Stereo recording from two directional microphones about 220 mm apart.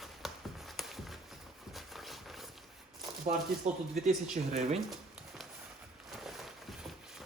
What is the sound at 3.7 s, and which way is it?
Speech, 30° right (ahead or behind).